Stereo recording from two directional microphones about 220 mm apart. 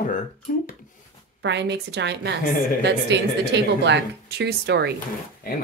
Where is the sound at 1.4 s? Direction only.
50° right (ahead or behind).